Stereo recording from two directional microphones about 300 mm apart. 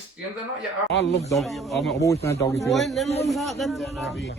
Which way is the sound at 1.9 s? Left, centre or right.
Centre.